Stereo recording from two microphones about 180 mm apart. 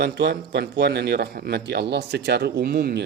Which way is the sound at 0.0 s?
70° right (ahead or behind).